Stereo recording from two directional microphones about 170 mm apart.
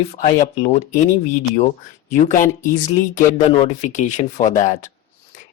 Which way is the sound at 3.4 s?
35° left (ahead or behind).